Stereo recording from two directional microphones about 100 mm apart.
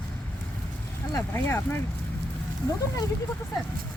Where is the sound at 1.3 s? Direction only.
25° left (ahead or behind).